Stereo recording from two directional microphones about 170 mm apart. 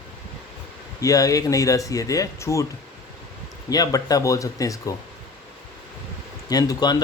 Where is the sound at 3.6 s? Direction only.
20° left (ahead or behind).